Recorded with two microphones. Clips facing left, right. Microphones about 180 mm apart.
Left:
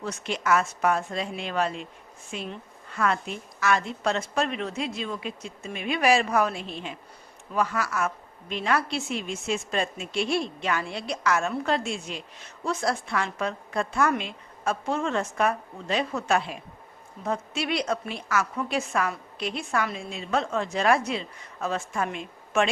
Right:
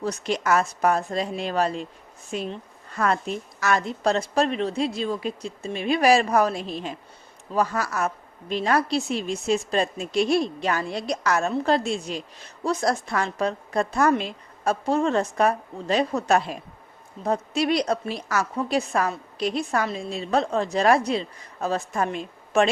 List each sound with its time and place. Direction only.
0.0 s a woman's voice: 35° right (ahead or behind)